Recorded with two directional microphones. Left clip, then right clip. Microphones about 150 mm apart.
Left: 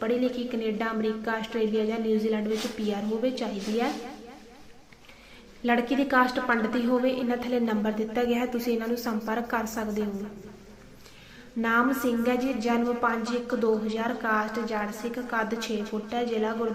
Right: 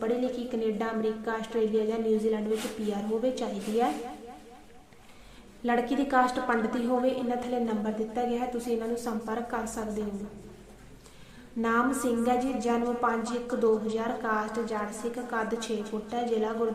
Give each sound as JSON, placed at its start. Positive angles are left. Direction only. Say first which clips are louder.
{"t": 0.0, "sound": "a woman's voice", "louder": "left 2 dB", "side_deg": 15}
{"t": 5.6, "sound": "a woman's voice", "louder": "left 2 dB", "side_deg": 15}
{"t": 11.6, "sound": "a woman's voice", "louder": "left 2 dB", "side_deg": 10}